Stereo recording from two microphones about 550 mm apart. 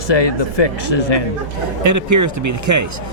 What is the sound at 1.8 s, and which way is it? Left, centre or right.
Speech, right.